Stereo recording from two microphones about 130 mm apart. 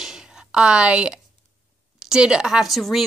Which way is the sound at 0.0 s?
5° right (ahead or behind).